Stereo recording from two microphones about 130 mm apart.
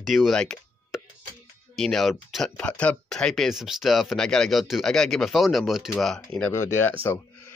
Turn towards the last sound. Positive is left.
turn(degrees=20)  # may be behind; listen again after turning